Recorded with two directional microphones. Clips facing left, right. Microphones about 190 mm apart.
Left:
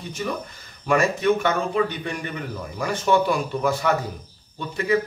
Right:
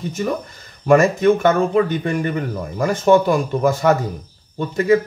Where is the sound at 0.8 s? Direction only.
45° right (ahead or behind).